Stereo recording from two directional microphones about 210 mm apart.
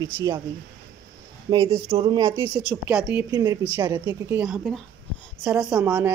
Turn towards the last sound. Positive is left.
turn(degrees=-5)  # may be behind; listen again after turning